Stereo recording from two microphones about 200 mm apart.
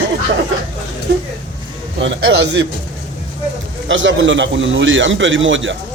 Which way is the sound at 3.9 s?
70° right (ahead or behind).